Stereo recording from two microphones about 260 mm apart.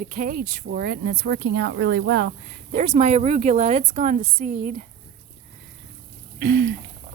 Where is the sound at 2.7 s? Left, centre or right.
Right.